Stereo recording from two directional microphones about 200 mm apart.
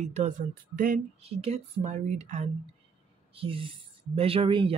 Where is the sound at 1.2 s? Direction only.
30° right (ahead or behind).